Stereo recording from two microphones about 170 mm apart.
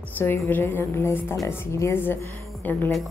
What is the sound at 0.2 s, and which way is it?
A woman's voice, 10° left (ahead or behind).